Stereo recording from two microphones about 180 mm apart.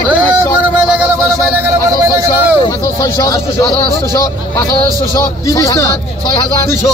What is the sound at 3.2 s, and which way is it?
Speech, 20° left (ahead or behind).